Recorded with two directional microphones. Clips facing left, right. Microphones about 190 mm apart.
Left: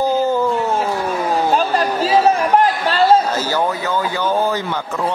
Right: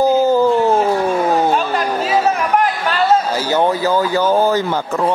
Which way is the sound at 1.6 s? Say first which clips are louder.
Left 1 dB; 35° left (ahead or behind).